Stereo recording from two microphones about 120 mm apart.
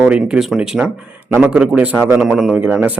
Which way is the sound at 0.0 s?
5° right (ahead or behind).